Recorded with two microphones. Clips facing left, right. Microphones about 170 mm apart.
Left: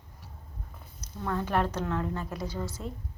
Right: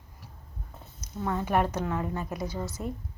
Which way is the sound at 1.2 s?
10° right (ahead or behind).